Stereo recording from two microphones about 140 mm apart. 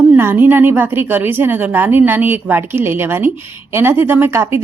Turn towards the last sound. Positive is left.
turn(degrees=-15)  # may be behind; listen again after turning